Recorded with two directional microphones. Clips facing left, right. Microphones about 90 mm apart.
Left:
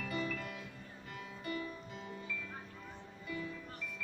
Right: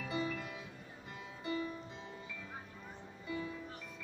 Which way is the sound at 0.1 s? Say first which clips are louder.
Right 2 dB; 20° right (ahead or behind).